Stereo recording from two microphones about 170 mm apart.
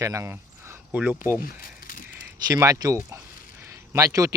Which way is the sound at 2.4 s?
20° right (ahead or behind).